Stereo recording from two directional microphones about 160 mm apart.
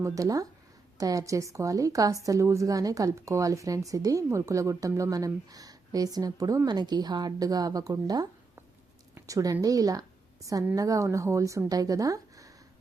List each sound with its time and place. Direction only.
0.0 s a woman's voice: 20° right (ahead or behind)